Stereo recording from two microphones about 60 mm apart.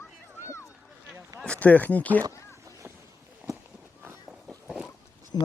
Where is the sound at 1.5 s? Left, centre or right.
Left.